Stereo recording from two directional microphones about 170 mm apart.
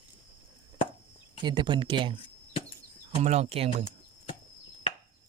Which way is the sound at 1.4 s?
25° right (ahead or behind).